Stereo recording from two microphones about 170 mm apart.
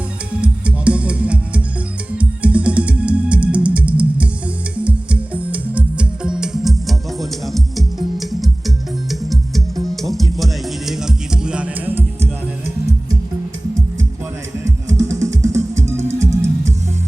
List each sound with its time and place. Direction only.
0.4 s music: 5° right (ahead or behind)
9.9 s music: centre (ahead or behind)
14.6 s music: 20° right (ahead or behind)